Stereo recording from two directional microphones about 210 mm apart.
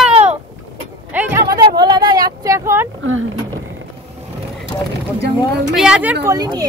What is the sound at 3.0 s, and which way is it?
Speech, 70° right (ahead or behind).